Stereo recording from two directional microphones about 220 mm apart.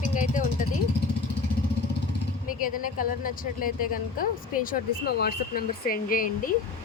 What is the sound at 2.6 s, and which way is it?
Speech, 40° left (ahead or behind).